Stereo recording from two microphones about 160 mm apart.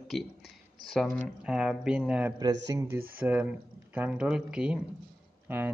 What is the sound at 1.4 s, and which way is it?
Speech, 5° right (ahead or behind).